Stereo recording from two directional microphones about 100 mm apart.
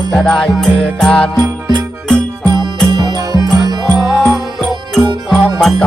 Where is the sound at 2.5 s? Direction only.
45° right (ahead or behind).